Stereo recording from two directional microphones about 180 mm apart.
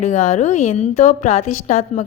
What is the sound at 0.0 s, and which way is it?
A woman's voice, 40° left (ahead or behind).